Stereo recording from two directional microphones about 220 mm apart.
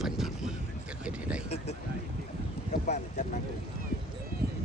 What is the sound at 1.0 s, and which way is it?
Speech, 5° right (ahead or behind).